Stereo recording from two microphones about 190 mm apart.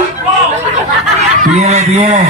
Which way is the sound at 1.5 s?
35° right (ahead or behind).